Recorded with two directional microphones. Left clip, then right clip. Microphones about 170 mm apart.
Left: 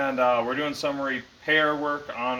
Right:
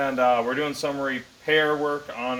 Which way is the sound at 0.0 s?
10° right (ahead or behind).